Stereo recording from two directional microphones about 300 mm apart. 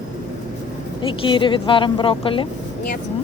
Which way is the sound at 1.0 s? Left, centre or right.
Centre.